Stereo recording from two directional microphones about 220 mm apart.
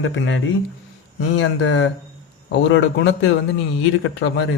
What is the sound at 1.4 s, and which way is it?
Speech, 60° left (ahead or behind).